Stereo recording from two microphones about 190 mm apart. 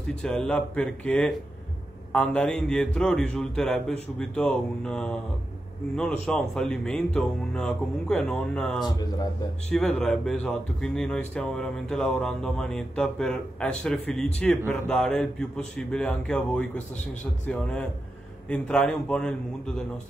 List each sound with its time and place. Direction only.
0.1 s speech: 5° left (ahead or behind)
6.2 s speech: 5° left (ahead or behind)
16.7 s a man's voice: 40° left (ahead or behind)
17.5 s speech: 5° left (ahead or behind)